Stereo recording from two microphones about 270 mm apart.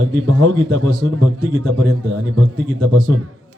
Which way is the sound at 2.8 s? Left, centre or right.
Right.